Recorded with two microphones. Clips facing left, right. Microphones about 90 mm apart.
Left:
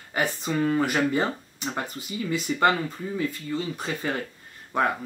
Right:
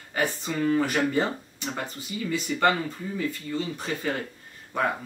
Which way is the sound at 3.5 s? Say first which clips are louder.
Even; 25° left (ahead or behind).